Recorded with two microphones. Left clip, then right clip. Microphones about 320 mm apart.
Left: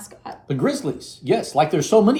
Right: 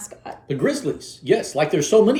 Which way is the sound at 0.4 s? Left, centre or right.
Centre.